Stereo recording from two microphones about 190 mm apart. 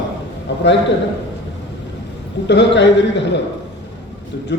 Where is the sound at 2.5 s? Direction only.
65° left (ahead or behind).